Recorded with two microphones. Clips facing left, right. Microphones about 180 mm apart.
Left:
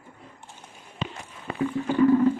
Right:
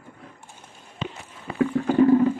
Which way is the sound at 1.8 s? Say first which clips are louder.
Right 6 dB; 50° right (ahead or behind).